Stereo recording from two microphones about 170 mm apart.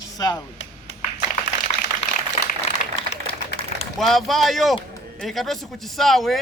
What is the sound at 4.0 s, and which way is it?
A man's voice, centre (ahead or behind).